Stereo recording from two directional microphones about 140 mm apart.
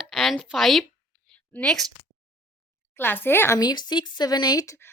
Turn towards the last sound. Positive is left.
turn(degrees=25)  # may be behind; listen again after turning